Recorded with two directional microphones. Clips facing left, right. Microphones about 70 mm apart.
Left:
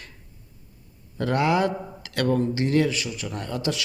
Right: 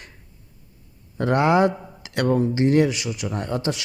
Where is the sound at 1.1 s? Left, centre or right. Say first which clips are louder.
Right 4 dB; right.